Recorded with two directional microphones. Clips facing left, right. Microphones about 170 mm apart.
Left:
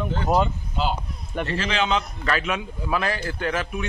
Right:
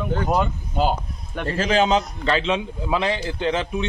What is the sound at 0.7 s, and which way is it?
A man's voice, 45° right (ahead or behind).